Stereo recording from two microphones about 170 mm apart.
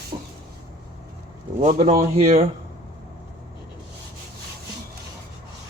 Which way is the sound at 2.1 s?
45° right (ahead or behind).